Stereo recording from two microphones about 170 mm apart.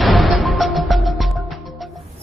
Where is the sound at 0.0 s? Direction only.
Centre (ahead or behind).